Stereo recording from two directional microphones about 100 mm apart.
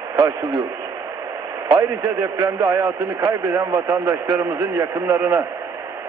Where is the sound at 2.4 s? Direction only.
45° right (ahead or behind).